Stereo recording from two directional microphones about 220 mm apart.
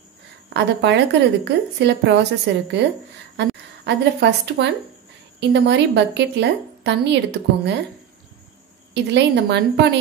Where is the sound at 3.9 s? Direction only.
50° right (ahead or behind).